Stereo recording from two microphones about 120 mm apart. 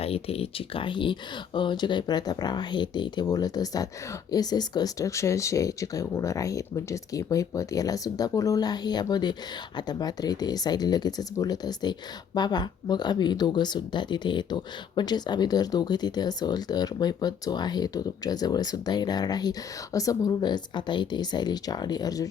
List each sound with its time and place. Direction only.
0.0 s speech: 55° left (ahead or behind); by 22.3 s 30° left (ahead or behind)